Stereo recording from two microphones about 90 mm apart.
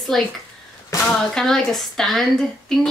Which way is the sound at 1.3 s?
5° left (ahead or behind).